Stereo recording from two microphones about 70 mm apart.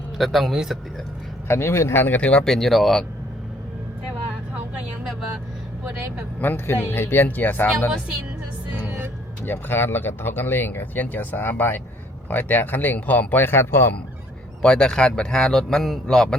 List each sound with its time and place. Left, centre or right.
0.2 s speech: centre
1.5 s speech: left
2.4 s speech: centre
6.4 s speech: left
9.4 s speech: left
14.6 s speech: centre